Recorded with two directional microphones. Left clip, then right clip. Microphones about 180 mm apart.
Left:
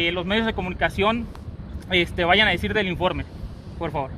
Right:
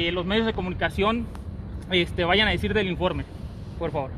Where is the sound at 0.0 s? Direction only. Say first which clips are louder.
Left 2 dB; 30° left (ahead or behind).